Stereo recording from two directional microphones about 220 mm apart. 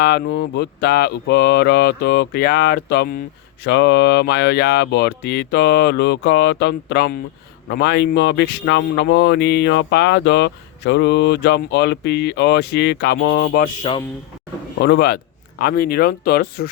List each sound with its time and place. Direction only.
0.0 s speech: 50° left (ahead or behind)
13.9 s a man's voice: 25° left (ahead or behind)
14.8 s speech: 50° left (ahead or behind)